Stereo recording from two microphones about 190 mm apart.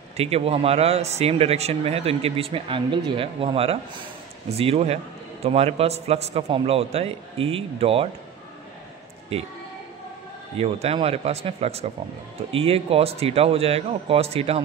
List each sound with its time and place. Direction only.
0.2 s a man's voice: 30° right (ahead or behind)
10.6 s a man's voice: 30° right (ahead or behind)